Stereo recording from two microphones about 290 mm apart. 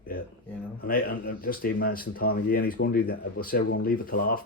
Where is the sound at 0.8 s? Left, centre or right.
Left.